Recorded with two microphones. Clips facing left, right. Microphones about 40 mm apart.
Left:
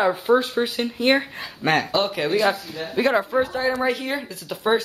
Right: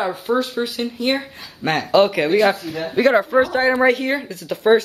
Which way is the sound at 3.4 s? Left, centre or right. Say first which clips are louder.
Right 5 dB; right.